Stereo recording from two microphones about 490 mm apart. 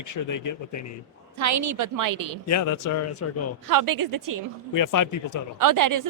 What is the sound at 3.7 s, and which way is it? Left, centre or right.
Speech, right.